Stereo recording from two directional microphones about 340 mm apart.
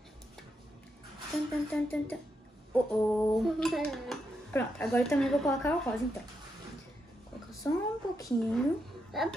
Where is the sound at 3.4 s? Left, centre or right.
Centre.